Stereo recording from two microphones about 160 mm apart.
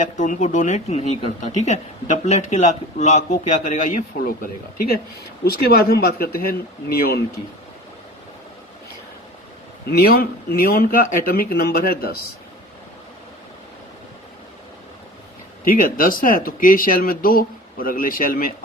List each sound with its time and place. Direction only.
0.0 s speech: 50° left (ahead or behind)
5.5 s speech: 70° left (ahead or behind)
9.9 s speech: 75° left (ahead or behind)
15.6 s speech: 60° left (ahead or behind)